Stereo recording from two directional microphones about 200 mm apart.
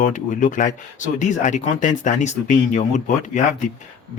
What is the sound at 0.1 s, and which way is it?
Speech, 40° left (ahead or behind).